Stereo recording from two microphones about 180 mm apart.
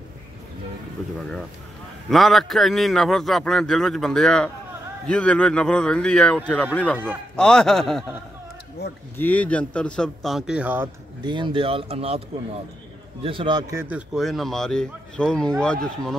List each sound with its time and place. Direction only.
1.0 s a man's voice: centre (ahead or behind)
8.8 s speech: 65° left (ahead or behind)
9.1 s a man's voice: 10° left (ahead or behind); by 10.9 s 10° right (ahead or behind)
11.2 s speech: 25° right (ahead or behind)
13.2 s a man's voice: 30° right (ahead or behind); by 16.2 s 5° left (ahead or behind)